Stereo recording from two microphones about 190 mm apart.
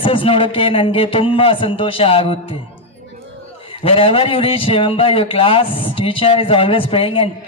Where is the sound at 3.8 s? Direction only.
30° left (ahead or behind).